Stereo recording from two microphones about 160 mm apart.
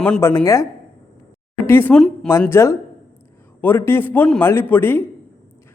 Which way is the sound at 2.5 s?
15° left (ahead or behind).